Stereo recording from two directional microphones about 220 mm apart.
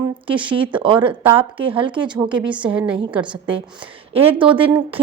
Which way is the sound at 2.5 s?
5° right (ahead or behind).